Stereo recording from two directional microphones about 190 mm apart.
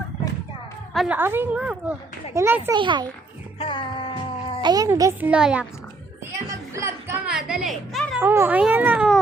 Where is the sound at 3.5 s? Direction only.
25° left (ahead or behind).